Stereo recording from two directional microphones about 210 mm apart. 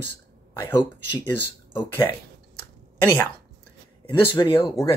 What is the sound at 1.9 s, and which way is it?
Speech, 10° left (ahead or behind).